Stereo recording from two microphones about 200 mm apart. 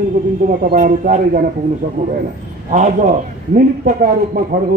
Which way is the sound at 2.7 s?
40° right (ahead or behind).